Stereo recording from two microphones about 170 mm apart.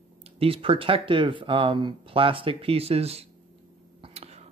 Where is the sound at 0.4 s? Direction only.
35° right (ahead or behind).